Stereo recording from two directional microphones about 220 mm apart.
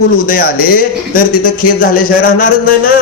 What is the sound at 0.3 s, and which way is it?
A man's voice, 40° left (ahead or behind).